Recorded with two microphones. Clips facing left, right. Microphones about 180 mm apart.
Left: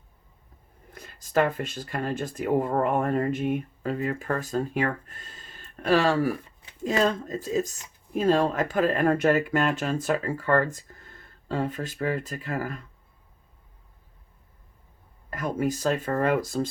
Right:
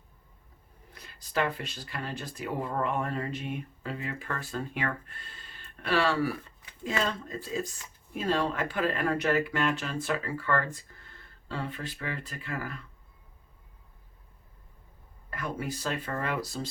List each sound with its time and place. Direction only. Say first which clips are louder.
0.9 s speech: left 7 dB; 45° left (ahead or behind)
15.3 s speech: left 8 dB; 40° left (ahead or behind)